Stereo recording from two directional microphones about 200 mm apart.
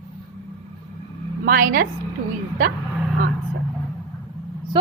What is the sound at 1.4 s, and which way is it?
Speech, 45° right (ahead or behind).